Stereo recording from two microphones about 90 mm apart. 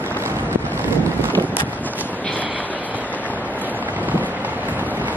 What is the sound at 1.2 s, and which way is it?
Wind noise, 20° left (ahead or behind).